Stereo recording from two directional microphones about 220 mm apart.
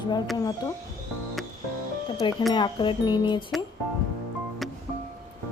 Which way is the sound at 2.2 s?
20° left (ahead or behind).